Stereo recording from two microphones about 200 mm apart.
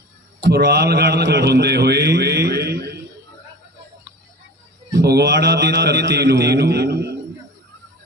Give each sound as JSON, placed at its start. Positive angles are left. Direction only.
{"t": 0.4, "sound": "a man's voice", "side_deg": -55}
{"t": 4.9, "sound": "a man's voice", "side_deg": -55}